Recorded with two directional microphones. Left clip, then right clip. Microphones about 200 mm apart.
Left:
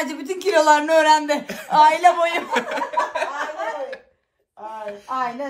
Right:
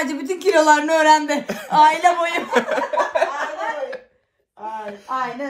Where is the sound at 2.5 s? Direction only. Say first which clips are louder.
Right 3 dB; 10° right (ahead or behind).